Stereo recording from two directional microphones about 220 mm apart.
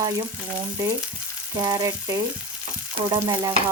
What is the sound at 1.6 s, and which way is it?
Speech, 15° right (ahead or behind).